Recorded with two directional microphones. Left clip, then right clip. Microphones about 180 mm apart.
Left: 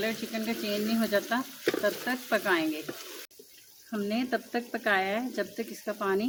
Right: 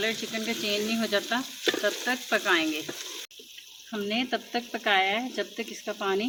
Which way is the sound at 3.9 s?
35° left (ahead or behind).